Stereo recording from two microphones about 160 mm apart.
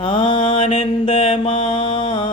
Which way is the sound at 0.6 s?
35° left (ahead or behind).